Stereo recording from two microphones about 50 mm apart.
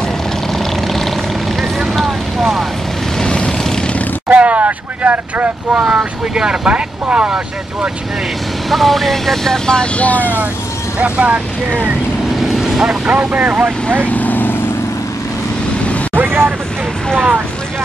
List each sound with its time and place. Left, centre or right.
0.6 s vehicle: centre
3.2 s vehicle: centre
4.3 s speech: right
8.6 s speech: centre
9.9 s speech: left
11.0 s speech: right
12.4 s boat: centre
13.0 s speech: right
14.0 s vehicle: left
16.2 s vehicle: right